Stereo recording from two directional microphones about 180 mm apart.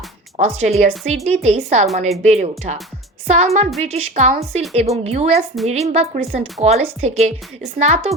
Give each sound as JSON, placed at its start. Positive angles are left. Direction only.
{"t": 0.3, "sound": "a woman's voice", "side_deg": -40}